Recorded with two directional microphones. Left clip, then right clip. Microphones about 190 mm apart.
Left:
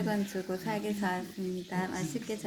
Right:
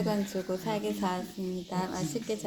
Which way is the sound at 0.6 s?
10° right (ahead or behind).